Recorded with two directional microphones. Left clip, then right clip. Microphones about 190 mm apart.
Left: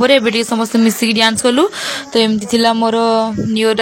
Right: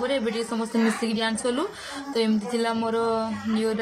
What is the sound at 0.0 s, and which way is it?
Speech, 55° left (ahead or behind).